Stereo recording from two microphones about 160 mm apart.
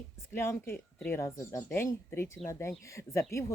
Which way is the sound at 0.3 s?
15° left (ahead or behind).